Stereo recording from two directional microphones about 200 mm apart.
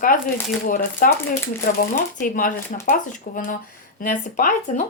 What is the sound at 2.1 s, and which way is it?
Speech, 45° left (ahead or behind).